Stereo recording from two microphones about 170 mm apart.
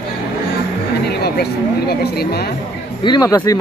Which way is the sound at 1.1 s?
70° left (ahead or behind).